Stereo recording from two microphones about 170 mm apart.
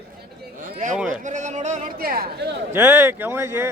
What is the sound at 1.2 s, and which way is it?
Speech, 45° right (ahead or behind).